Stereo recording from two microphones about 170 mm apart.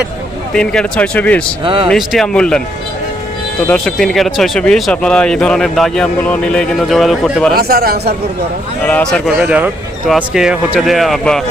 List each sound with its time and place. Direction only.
0.5 s speech: 5° left (ahead or behind)
1.6 s speech: 30° right (ahead or behind)
1.9 s speech: 5° left (ahead or behind)
3.7 s speech: centre (ahead or behind)
7.5 s speech: 65° right (ahead or behind)
8.9 s speech: 10° left (ahead or behind)
9.4 s speech: 5° right (ahead or behind)